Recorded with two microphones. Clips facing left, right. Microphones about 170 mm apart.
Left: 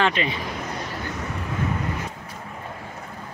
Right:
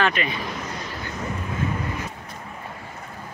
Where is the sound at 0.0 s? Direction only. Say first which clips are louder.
Left 1 dB; 25° left (ahead or behind).